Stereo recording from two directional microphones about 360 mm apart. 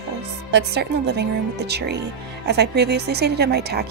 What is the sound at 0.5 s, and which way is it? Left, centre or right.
Speech, right.